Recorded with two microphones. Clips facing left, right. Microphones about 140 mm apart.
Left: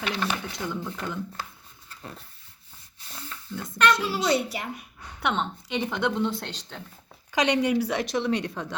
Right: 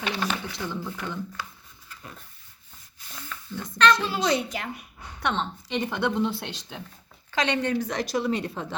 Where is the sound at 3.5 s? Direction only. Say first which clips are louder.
Right 2 dB; centre (ahead or behind).